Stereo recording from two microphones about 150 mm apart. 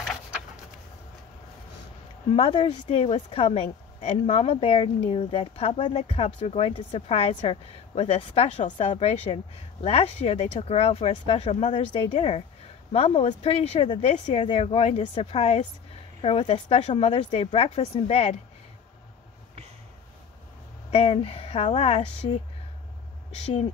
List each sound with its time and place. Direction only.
2.3 s speech: 40° left (ahead or behind)
16.6 s speech: 40° left (ahead or behind)
20.9 s speech: 40° left (ahead or behind)